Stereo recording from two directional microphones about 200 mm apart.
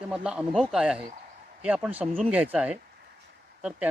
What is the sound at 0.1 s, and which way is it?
Speech, 5° right (ahead or behind).